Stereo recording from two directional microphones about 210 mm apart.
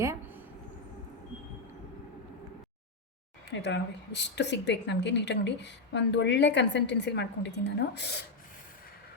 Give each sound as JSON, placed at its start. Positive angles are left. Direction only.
{"t": 0.0, "sound": "vehicle", "side_deg": -10}
{"t": 3.6, "sound": "speech", "side_deg": 55}